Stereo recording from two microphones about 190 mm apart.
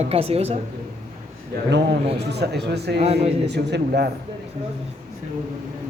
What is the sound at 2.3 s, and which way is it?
Speech, 60° right (ahead or behind).